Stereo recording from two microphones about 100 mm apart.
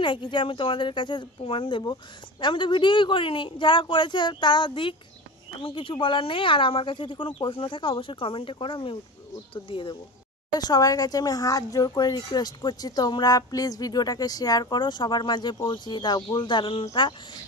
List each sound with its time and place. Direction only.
0.0 s speech: 50° left (ahead or behind)
10.5 s speech: 40° left (ahead or behind)